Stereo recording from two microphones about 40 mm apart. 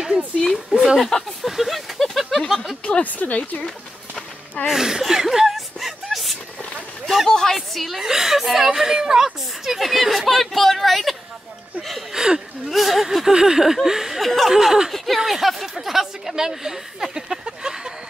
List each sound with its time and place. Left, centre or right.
0.4 s a woman's voice: centre
1.4 s speech: centre
3.0 s speech: left
3.6 s a sound: left
4.6 s a woman's voice: centre
5.0 s chuckle: centre
7.2 s a woman's voice: centre
7.5 s speech: centre
8.0 s a woman's voice: centre
9.8 s speech: centre
12.1 s a sound: centre
12.6 s a woman's voice: centre
14.2 s speech: centre
14.5 s a woman's voice: centre